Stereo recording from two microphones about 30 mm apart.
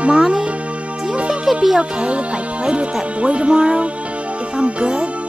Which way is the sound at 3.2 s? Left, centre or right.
Right.